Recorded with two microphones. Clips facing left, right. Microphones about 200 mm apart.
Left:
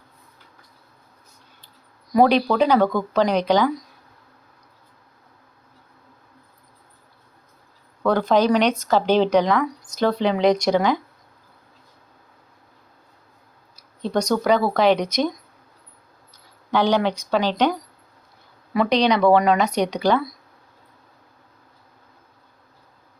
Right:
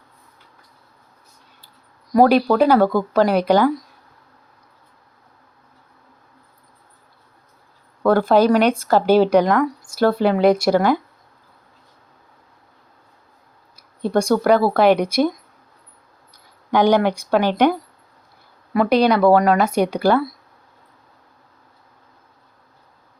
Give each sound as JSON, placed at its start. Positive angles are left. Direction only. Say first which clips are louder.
{"t": 2.1, "sound": "speech", "louder": "right 3 dB", "side_deg": -5}
{"t": 8.0, "sound": "speech", "louder": "right 3 dB", "side_deg": -10}
{"t": 13.7, "sound": "speech", "louder": "right 4 dB", "side_deg": -10}
{"t": 16.7, "sound": "speech", "louder": "right 4 dB", "side_deg": -15}
{"t": 18.8, "sound": "speech", "louder": "right 3 dB", "side_deg": -5}